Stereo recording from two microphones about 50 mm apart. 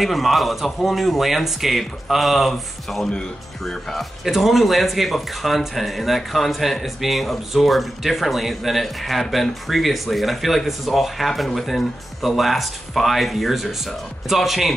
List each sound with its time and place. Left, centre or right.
0.0 s speech: centre
4.2 s speech: centre